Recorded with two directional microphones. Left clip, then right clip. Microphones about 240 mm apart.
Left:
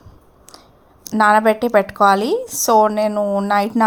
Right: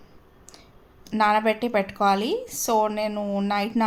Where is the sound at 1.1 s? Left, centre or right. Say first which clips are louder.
Left 8 dB; left.